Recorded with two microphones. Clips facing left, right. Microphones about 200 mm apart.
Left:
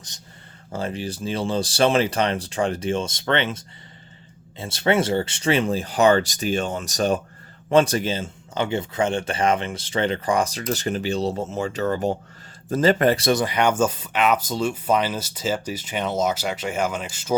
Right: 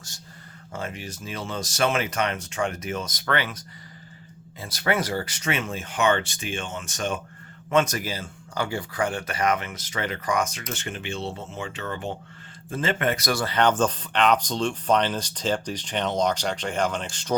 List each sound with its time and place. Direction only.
0.7 s speech: 30° left (ahead or behind)
13.4 s speech: 10° left (ahead or behind)